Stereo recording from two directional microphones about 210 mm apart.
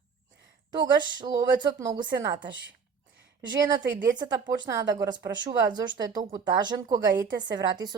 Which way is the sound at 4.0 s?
20° right (ahead or behind).